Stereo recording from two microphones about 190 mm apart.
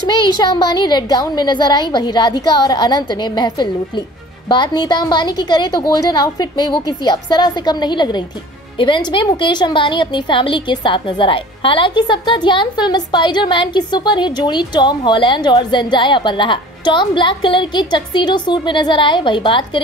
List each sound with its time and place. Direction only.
0.2 s a woman's voice: 25° left (ahead or behind)